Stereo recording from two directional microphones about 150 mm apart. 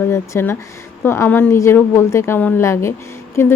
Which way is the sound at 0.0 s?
15° left (ahead or behind).